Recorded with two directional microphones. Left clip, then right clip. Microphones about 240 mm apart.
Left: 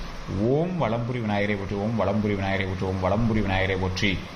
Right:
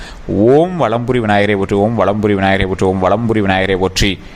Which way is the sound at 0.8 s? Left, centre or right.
Right.